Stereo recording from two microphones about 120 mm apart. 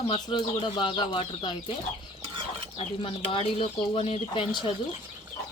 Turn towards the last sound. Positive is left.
turn(degrees=55)  # may be behind; listen again after turning